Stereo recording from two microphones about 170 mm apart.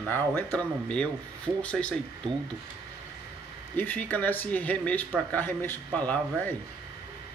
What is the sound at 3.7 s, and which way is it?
Speech, 10° left (ahead or behind).